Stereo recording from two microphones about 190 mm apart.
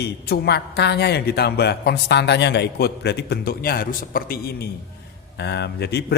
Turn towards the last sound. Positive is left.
turn(degrees=60)  # may be behind; listen again after turning